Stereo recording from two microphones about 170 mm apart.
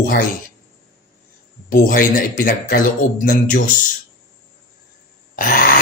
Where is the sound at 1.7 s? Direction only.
55° left (ahead or behind).